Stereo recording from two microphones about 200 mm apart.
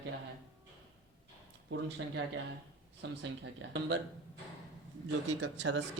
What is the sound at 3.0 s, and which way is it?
Speech, 65° right (ahead or behind).